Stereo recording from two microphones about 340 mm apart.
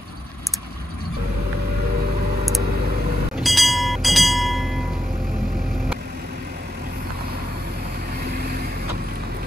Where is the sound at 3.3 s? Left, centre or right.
Centre.